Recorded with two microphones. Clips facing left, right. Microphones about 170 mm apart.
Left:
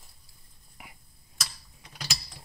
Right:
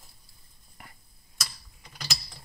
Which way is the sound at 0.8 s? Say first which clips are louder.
Left 1 dB; 5° left (ahead or behind).